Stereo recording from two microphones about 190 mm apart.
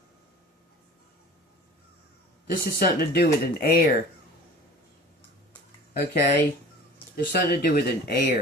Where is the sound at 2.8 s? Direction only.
55° left (ahead or behind).